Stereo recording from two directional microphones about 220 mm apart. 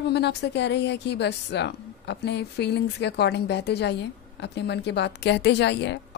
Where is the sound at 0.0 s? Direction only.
50° left (ahead or behind).